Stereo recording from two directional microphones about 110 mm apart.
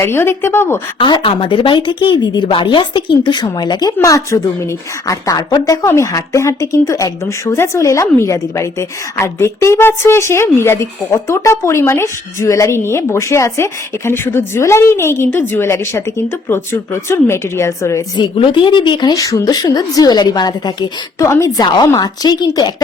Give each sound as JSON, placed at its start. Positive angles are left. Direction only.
{"t": 0.0, "sound": "a woman's voice", "side_deg": 20}
{"t": 0.9, "sound": "a woman's voice", "side_deg": 50}
{"t": 18.2, "sound": "a woman's voice", "side_deg": 50}
{"t": 21.2, "sound": "a woman's voice", "side_deg": 25}
{"t": 21.7, "sound": "a woman's voice", "side_deg": 40}